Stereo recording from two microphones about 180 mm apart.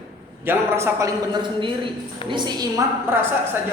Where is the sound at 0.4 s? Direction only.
15° right (ahead or behind).